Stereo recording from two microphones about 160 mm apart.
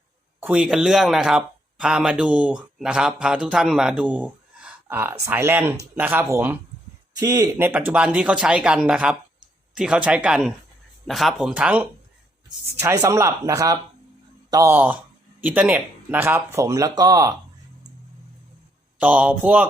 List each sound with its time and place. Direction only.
0.3 s a sound: 15° right (ahead or behind)
0.6 s speech: 5° right (ahead or behind)
12.8 s speech: 20° right (ahead or behind)
18.9 s speech: 10° right (ahead or behind)